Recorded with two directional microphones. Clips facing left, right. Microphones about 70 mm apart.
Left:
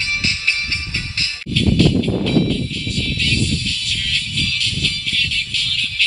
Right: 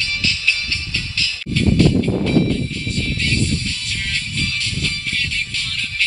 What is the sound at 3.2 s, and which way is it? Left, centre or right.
Music, right.